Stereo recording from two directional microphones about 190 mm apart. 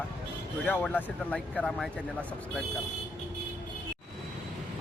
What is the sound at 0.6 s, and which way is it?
Speech, 10° left (ahead or behind).